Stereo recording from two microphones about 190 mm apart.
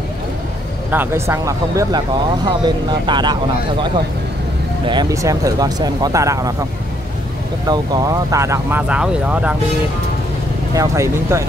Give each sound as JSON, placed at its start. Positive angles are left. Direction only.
{"t": 0.9, "sound": "speech", "side_deg": -15}
{"t": 4.8, "sound": "speech", "side_deg": -20}
{"t": 7.6, "sound": "speech", "side_deg": -20}
{"t": 10.7, "sound": "speech", "side_deg": -15}